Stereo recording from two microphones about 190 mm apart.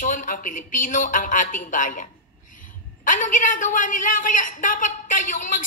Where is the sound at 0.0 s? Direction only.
45° left (ahead or behind).